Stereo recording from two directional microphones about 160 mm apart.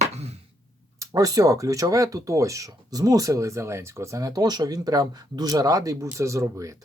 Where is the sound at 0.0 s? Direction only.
40° right (ahead or behind).